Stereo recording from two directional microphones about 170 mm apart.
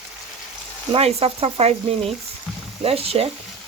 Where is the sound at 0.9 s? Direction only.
35° right (ahead or behind).